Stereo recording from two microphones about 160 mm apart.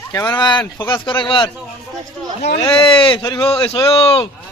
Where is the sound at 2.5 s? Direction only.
35° left (ahead or behind).